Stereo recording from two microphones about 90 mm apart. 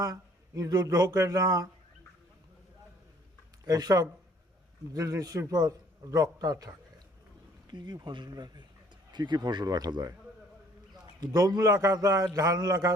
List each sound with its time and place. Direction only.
0.0 s a man's voice: 40° right (ahead or behind)
3.7 s a man's voice: 45° right (ahead or behind)
7.7 s a man's voice: 55° right (ahead or behind)
11.2 s a man's voice: 45° right (ahead or behind)